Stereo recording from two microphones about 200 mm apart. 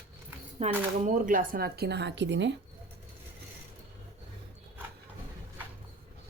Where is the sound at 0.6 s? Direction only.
35° right (ahead or behind); by 2.5 s 65° right (ahead or behind).